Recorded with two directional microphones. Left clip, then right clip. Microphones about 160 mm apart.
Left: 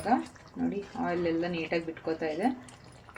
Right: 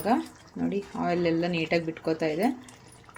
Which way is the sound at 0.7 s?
70° right (ahead or behind).